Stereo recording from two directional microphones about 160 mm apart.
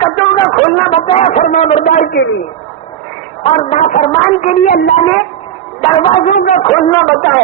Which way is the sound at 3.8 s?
50° left (ahead or behind).